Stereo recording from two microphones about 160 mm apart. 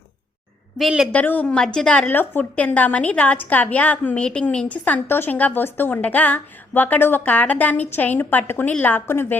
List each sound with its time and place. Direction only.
0.8 s a woman's voice: centre (ahead or behind)
1.1 s a woman's voice: 10° left (ahead or behind)